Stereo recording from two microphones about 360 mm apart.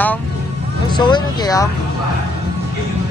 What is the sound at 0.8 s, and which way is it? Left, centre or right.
Speech, centre.